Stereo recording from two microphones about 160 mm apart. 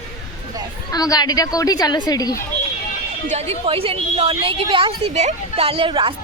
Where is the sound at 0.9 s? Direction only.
25° left (ahead or behind).